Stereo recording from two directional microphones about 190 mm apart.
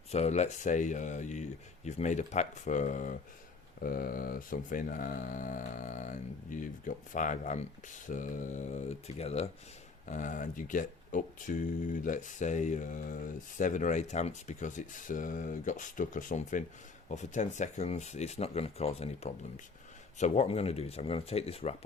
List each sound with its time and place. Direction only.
0.1 s speech: 35° left (ahead or behind)